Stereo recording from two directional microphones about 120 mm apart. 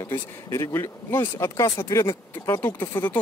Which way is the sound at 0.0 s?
25° left (ahead or behind).